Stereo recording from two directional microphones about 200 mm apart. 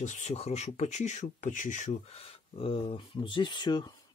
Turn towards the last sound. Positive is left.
turn(degrees=20)  # may be behind; listen again after turning